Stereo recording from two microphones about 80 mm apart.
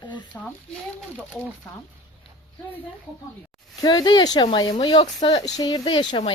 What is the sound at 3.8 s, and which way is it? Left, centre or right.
Speech, left.